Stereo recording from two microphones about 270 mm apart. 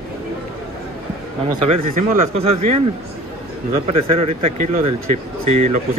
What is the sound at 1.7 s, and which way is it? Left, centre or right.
Speech, right.